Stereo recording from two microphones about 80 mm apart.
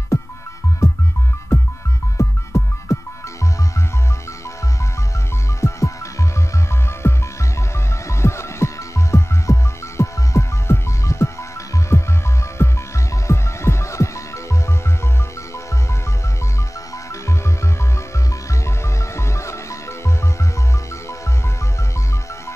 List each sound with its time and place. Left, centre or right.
0.8 s music: left
2.1 s music: left
5.6 s music: left
19.1 s music: left